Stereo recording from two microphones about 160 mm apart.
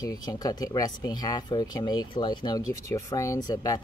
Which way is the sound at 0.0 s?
20° left (ahead or behind).